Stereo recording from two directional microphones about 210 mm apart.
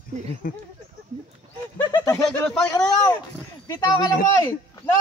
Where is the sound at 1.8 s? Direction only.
15° left (ahead or behind).